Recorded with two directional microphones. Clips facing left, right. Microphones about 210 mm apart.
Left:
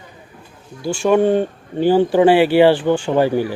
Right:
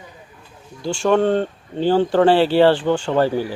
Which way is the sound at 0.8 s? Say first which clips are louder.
Left 2 dB; 10° left (ahead or behind).